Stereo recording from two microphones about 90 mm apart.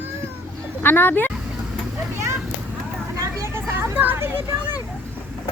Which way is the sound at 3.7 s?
25° right (ahead or behind).